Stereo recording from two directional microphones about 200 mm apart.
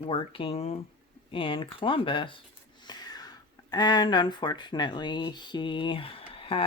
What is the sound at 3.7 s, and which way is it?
Speech, 20° left (ahead or behind).